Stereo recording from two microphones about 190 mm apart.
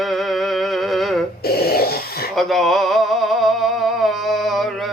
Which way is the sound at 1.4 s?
55° left (ahead or behind).